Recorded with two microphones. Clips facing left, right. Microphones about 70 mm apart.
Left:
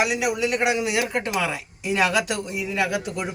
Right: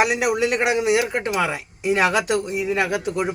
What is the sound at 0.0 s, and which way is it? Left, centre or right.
Speech, right.